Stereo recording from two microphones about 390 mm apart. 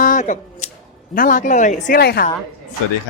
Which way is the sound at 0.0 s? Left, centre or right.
Centre.